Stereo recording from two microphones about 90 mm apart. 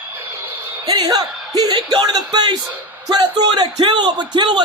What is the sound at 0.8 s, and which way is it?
Speech, 45° right (ahead or behind).